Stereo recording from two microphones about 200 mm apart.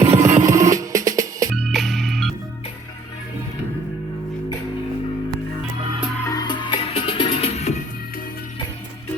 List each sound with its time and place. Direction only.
0.0 s music: 10° right (ahead or behind)
1.5 s organ: centre (ahead or behind)
6.2 s music: 20° left (ahead or behind)